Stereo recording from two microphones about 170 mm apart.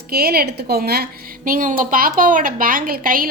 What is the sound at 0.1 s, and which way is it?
Speech, 65° right (ahead or behind).